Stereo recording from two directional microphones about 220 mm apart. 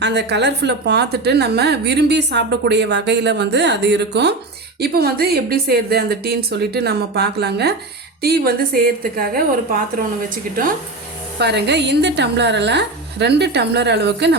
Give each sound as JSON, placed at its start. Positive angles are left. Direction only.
{"t": 0.0, "sound": "a woman's voice", "side_deg": -50}
{"t": 11.3, "sound": "a woman's voice", "side_deg": -50}